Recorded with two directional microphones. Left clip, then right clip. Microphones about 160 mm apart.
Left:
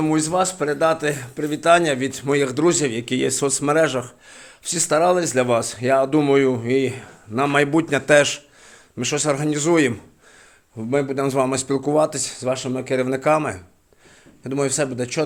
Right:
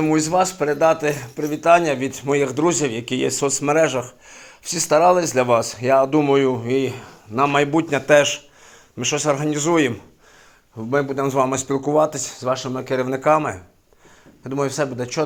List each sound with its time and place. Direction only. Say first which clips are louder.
0.0 s a man's voice: right 2 dB; 10° left (ahead or behind); by 14.8 s 35° left (ahead or behind)